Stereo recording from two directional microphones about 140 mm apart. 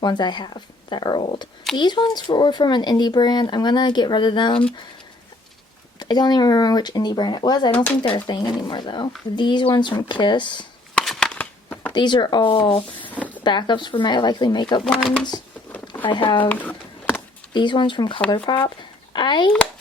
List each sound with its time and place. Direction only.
0.0 s speech: 30° left (ahead or behind)
6.0 s speech: 30° left (ahead or behind)
10.9 s a sound: 5° left (ahead or behind)
11.9 s speech: 35° left (ahead or behind)
13.1 s a sound: 10° left (ahead or behind)
13.4 s speech: 35° left (ahead or behind)
14.8 s speech: 5° left (ahead or behind)
16.0 s speech: 35° left (ahead or behind)
16.5 s a sound: 10° left (ahead or behind)
17.5 s speech: 35° left (ahead or behind)